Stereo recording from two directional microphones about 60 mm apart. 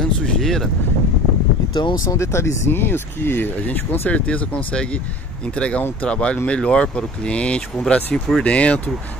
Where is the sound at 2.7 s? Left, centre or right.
Left.